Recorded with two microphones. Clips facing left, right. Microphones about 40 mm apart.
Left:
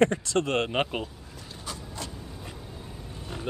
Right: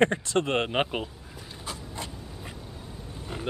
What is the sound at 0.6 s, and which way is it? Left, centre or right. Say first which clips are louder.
Speech: right 1 dB; centre.